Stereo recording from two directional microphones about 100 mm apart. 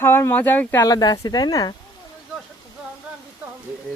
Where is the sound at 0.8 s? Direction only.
40° left (ahead or behind).